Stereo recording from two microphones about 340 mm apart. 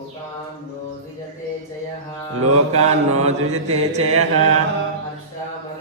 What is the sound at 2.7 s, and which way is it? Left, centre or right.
Mantra, centre.